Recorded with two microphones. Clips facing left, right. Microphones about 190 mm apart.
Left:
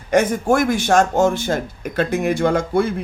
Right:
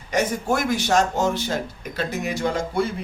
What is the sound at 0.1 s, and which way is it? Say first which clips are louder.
Speech: left 6 dB; 50° left (ahead or behind).